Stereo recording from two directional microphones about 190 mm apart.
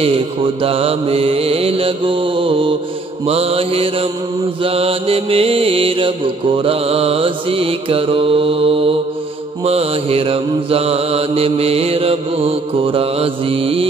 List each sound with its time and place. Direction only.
0.0 s mantra: 30° right (ahead or behind)